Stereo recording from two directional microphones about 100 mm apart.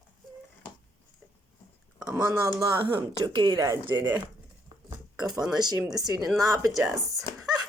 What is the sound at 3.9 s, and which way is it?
Speech, 20° right (ahead or behind).